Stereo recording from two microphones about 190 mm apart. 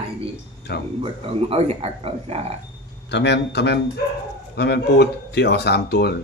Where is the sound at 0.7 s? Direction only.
60° left (ahead or behind).